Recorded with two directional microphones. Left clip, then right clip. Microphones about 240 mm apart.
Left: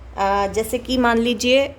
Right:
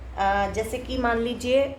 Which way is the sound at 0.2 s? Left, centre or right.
Left.